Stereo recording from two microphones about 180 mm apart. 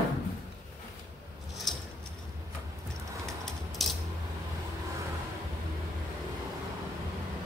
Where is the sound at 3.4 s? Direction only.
Centre (ahead or behind).